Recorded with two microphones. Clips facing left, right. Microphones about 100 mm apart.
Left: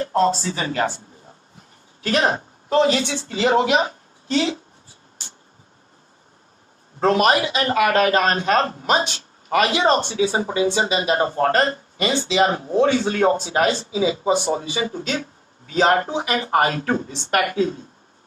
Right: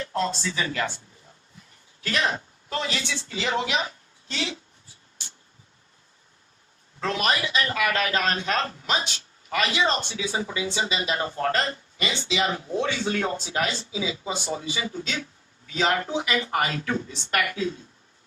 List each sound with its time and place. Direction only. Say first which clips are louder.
0.0 s a woman's voice: left 8 dB; 40° left (ahead or behind)
2.0 s a woman's voice: left 6 dB; 40° left (ahead or behind)
7.0 s a man's voice: left 9 dB; 45° left (ahead or behind)